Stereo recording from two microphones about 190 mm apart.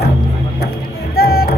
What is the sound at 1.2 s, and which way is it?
Music, 55° left (ahead or behind).